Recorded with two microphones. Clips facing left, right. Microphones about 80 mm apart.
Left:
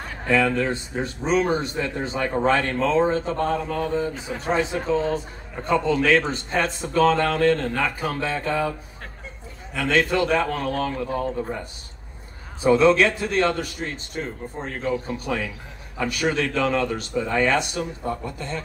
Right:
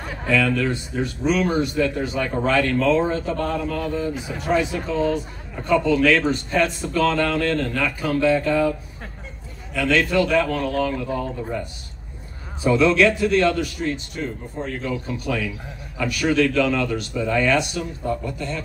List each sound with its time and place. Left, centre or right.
0.3 s a man's voice: left
9.8 s a man's voice: left
12.6 s a man's voice: left